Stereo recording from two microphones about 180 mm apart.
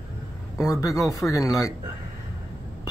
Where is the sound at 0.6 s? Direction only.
15° left (ahead or behind).